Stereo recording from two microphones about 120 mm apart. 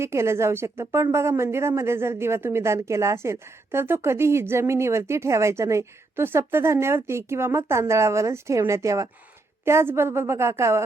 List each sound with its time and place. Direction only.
0.0 s a woman's voice: 20° right (ahead or behind)